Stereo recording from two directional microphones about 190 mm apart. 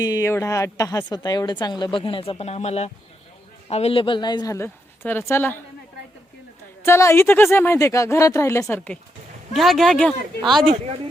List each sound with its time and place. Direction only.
0.0 s a woman's voice: 15° left (ahead or behind)
6.8 s speech: 15° left (ahead or behind)